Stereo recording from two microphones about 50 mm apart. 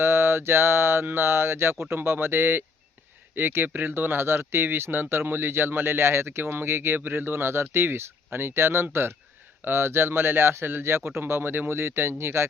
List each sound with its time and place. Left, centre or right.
0.0 s speech: right